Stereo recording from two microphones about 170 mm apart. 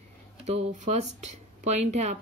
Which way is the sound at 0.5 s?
45° right (ahead or behind).